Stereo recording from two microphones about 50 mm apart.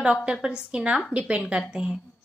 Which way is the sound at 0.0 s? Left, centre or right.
Centre.